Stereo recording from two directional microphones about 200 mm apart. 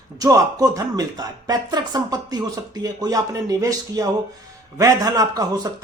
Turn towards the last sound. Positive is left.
turn(degrees=-20)  # may be behind; listen again after turning